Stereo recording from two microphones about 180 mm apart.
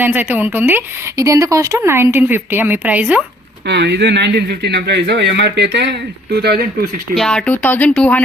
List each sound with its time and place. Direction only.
0.0 s speech: 10° right (ahead or behind)
3.7 s speech: 70° right (ahead or behind)
7.2 s speech: 5° left (ahead or behind)